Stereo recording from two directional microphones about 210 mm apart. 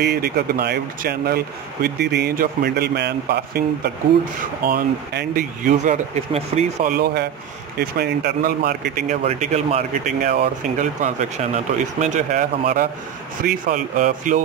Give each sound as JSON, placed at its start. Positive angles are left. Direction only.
{"t": 0.0, "sound": "speech", "side_deg": -50}
{"t": 8.0, "sound": "speech", "side_deg": -50}
{"t": 9.2, "sound": "speech", "side_deg": -30}